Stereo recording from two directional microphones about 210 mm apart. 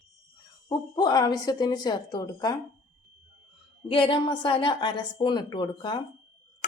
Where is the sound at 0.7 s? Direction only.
20° left (ahead or behind).